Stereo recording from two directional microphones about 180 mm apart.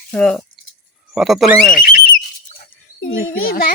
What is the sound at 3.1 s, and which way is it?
Speech, 85° left.